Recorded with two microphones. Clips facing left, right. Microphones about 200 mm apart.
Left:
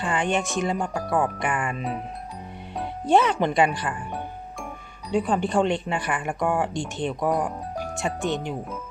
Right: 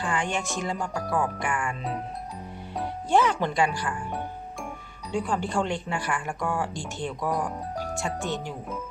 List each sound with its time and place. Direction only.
0.1 s a woman's voice: 20° left (ahead or behind)
3.1 s a woman's voice: 20° left (ahead or behind)
5.1 s a woman's voice: 20° left (ahead or behind)